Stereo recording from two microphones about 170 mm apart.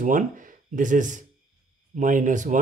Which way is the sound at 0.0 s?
50° right (ahead or behind).